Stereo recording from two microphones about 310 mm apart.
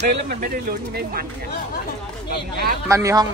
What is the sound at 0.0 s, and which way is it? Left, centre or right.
Speech, right.